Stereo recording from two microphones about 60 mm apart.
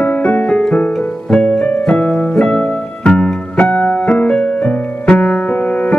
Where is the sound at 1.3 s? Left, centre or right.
Centre.